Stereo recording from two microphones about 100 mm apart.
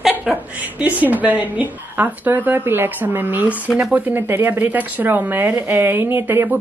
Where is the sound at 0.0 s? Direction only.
10° right (ahead or behind).